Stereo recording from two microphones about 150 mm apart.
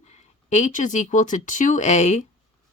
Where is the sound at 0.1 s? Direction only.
55° left (ahead or behind).